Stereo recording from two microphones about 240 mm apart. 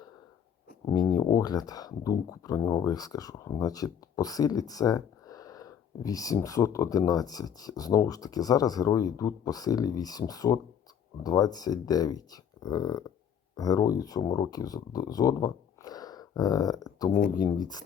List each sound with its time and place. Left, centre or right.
0.9 s speech: centre